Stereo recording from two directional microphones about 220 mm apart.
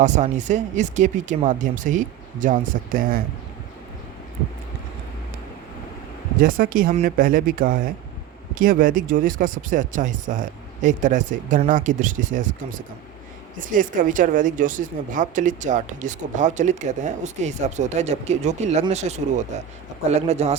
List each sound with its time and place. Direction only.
0.0 s a woman's voice: 35° right (ahead or behind)
6.4 s a woman's voice: 40° right (ahead or behind)